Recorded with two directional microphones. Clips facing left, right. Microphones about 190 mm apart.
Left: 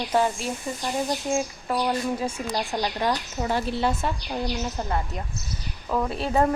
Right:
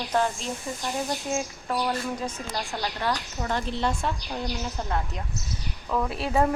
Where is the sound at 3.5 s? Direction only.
5° left (ahead or behind).